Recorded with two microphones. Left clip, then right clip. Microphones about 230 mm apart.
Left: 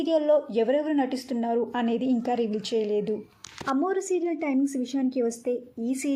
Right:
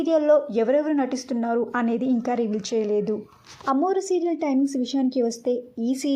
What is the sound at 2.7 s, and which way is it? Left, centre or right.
Speech, right.